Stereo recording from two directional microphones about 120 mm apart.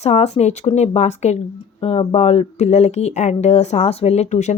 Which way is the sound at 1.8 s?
60° left (ahead or behind).